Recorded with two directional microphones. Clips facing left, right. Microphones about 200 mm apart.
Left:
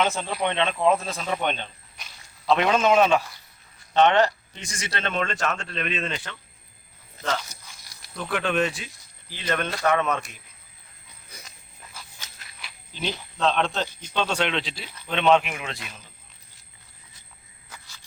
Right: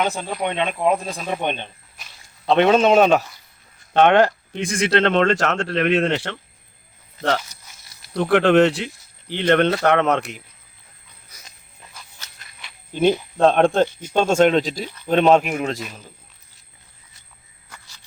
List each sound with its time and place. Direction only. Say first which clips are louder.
0.0 s speech: right 2 dB; 15° right (ahead or behind)
2.5 s speech: right 5 dB; 30° right (ahead or behind)
3.9 s speech: right 4 dB; 50° right (ahead or behind); by 6.3 s 75° right (ahead or behind)
7.2 s speech: right 7 dB; 55° right (ahead or behind)
8.1 s speech: right 11 dB; 75° right (ahead or behind)
11.9 s a sound: left 1 dB; 5° left (ahead or behind)
12.9 s speech: right 14 dB; 50° right (ahead or behind)